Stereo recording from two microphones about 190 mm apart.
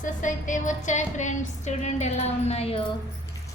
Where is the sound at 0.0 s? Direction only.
40° left (ahead or behind).